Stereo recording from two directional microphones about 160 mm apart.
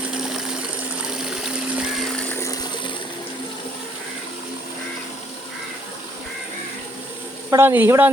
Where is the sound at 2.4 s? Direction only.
25° left (ahead or behind).